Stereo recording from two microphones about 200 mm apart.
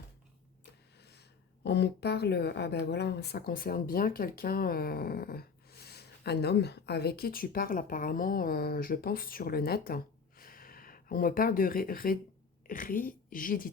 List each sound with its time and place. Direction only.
1.6 s speech: 55° left (ahead or behind)